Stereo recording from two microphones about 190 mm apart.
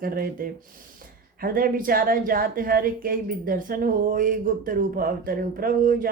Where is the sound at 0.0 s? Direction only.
50° right (ahead or behind).